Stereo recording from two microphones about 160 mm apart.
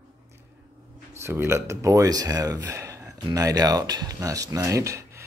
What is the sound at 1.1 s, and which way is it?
Speech, 15° right (ahead or behind).